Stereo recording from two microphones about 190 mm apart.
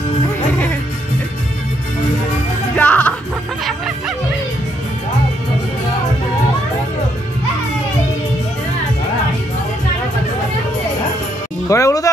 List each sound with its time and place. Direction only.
2.7 s music: 5° left (ahead or behind)
11.7 s music: 15° left (ahead or behind)